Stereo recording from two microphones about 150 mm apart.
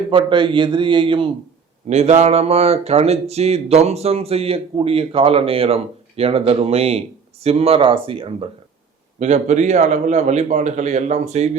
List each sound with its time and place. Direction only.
0.1 s a man's voice: 35° right (ahead or behind)
1.9 s a man's voice: 45° right (ahead or behind)
9.1 s speech: 50° right (ahead or behind)